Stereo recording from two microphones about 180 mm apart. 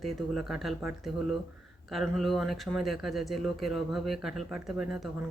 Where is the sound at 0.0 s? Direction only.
Centre (ahead or behind).